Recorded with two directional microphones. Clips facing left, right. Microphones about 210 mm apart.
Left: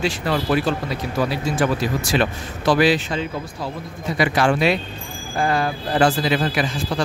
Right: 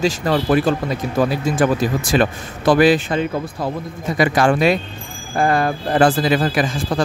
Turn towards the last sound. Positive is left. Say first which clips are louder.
# right 3 dB
turn(degrees=-50)  # may be behind; listen again after turning